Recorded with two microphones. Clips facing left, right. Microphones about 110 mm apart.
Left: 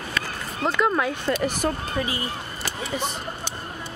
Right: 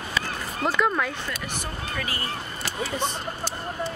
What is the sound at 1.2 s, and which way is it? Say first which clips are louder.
Speech: left 9 dB; 50° left (ahead or behind).